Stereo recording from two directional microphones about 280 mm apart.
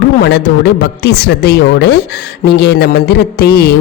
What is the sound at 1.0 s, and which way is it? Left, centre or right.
Speech, left.